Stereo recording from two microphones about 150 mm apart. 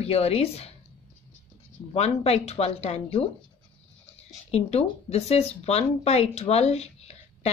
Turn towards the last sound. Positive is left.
turn(degrees=45)  # may be behind; listen again after turning